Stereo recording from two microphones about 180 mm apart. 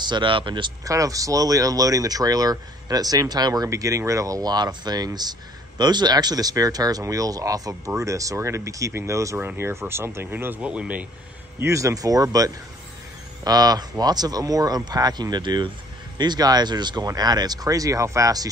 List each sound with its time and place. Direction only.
0.0 s speech: 25° right (ahead or behind); by 11.1 s 5° right (ahead or behind)
11.6 s speech: 15° right (ahead or behind)